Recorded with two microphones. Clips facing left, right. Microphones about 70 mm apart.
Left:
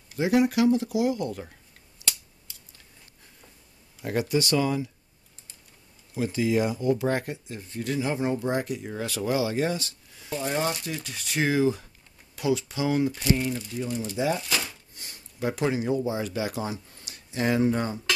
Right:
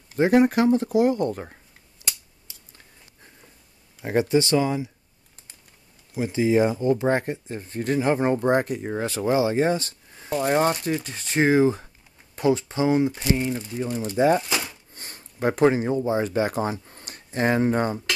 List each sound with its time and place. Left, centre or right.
0.1 s speech: right
4.0 s speech: right
6.1 s speech: right
10.3 s speech: right
14.4 s a sound: centre
15.0 s speech: right